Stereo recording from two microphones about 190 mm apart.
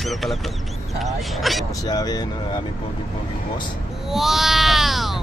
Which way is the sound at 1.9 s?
20° left (ahead or behind).